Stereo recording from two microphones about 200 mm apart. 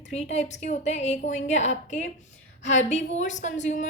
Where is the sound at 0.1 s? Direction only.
35° left (ahead or behind).